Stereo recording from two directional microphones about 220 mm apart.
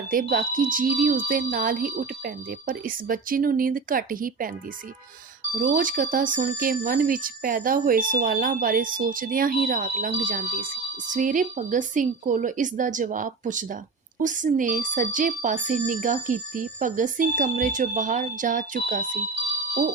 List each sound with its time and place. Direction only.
0.1 s speech: 40° right (ahead or behind)
5.5 s speech: 40° right (ahead or behind)